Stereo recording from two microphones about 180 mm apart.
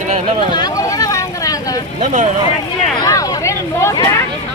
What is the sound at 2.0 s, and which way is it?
Speech, 45° right (ahead or behind).